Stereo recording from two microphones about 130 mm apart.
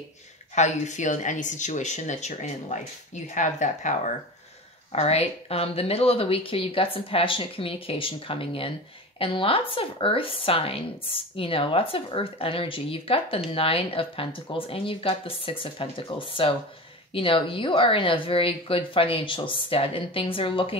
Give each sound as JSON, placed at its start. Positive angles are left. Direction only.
{"t": 0.6, "sound": "speech", "side_deg": 65}
{"t": 4.9, "sound": "speech", "side_deg": 50}